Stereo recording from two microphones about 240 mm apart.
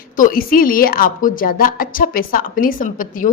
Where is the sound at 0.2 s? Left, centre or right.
Left.